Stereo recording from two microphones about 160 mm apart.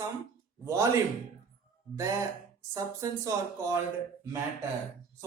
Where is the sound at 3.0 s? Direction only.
20° right (ahead or behind).